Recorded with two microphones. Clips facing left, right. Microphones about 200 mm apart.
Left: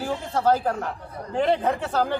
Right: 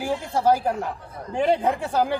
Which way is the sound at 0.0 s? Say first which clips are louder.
Right 1 dB; 10° right (ahead or behind).